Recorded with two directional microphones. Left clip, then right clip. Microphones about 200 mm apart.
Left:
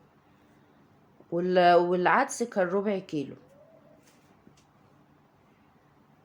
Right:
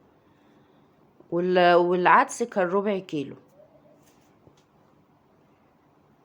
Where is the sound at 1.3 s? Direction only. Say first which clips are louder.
Right 2 dB; 25° right (ahead or behind).